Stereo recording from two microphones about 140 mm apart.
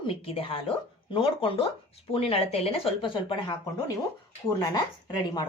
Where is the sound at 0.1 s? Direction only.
40° left (ahead or behind).